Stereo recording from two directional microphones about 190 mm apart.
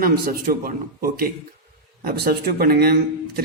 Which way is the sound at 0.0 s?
50° right (ahead or behind).